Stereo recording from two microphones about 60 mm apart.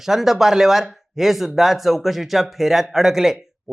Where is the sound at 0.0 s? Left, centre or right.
Centre.